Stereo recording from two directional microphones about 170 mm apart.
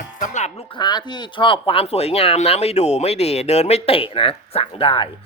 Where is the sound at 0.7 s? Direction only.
25° left (ahead or behind).